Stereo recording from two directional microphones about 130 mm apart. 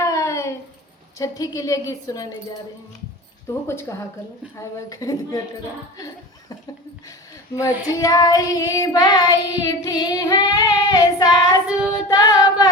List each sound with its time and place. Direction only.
0.0 s a sound: 25° left (ahead or behind)
1.2 s child singing: 30° left (ahead or behind)
3.7 s child singing: 20° left (ahead or behind)
7.5 s child singing: 25° left (ahead or behind)
11.7 s child singing: 10° right (ahead or behind)
12.0 s music: 30° left (ahead or behind)